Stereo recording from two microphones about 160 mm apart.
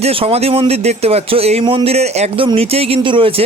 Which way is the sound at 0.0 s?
35° right (ahead or behind).